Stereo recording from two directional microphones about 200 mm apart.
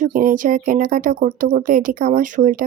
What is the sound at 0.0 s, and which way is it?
Speech, 45° right (ahead or behind).